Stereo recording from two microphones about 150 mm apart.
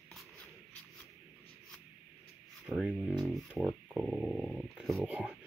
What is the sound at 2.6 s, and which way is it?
Speech, centre (ahead or behind).